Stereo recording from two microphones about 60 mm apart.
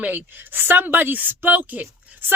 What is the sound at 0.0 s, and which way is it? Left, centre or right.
Speech, right.